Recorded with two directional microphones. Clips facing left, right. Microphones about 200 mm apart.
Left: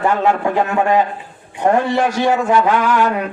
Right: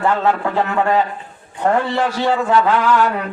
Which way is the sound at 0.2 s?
15° left (ahead or behind).